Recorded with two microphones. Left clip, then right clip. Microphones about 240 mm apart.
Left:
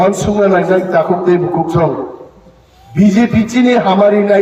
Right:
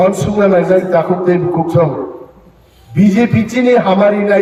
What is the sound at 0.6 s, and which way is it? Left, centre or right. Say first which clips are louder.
A man's voice: right 1 dB; left.